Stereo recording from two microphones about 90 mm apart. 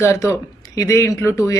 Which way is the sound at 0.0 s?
30° left (ahead or behind).